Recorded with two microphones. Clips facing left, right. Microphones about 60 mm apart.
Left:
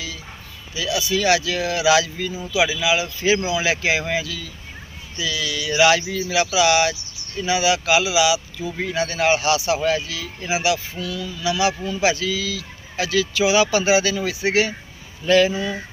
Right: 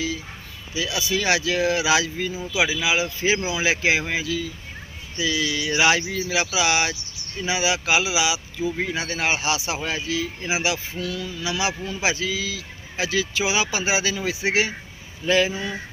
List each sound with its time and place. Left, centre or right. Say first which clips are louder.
0.7 s speech: left 2 dB; right